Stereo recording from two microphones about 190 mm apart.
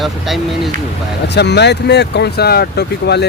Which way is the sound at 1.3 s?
65° left (ahead or behind).